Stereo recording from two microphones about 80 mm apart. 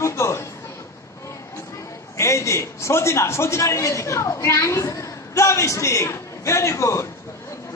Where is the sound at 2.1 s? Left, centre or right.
Left.